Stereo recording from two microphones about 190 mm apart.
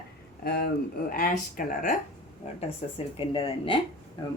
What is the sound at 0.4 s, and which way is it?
A woman's voice, 55° left (ahead or behind).